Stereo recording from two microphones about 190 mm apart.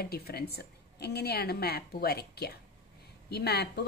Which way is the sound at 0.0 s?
55° left (ahead or behind).